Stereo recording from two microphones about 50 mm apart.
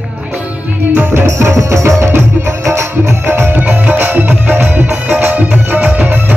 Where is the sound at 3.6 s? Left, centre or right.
Right.